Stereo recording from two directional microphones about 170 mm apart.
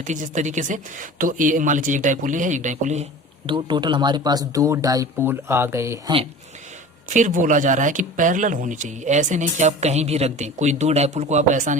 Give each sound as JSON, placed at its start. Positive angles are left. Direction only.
{"t": 0.0, "sound": "speech", "side_deg": -45}
{"t": 3.4, "sound": "speech", "side_deg": -30}
{"t": 7.1, "sound": "speech", "side_deg": -50}